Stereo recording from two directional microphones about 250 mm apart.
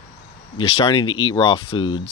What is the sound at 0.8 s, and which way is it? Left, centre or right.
Speech, left.